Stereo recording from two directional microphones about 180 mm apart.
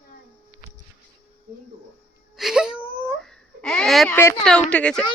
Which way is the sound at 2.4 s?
5° right (ahead or behind).